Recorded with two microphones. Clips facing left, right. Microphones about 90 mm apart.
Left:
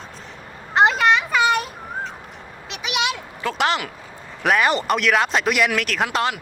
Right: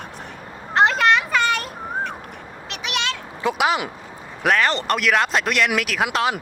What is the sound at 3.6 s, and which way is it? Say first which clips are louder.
Speech: even; 5° right (ahead or behind).